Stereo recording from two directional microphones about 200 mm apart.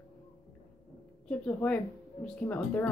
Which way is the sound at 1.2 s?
5° left (ahead or behind).